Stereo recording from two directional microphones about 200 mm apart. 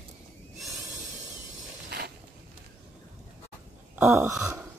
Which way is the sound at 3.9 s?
10° right (ahead or behind).